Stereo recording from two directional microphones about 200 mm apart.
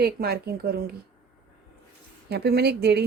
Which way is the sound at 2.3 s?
55° right (ahead or behind).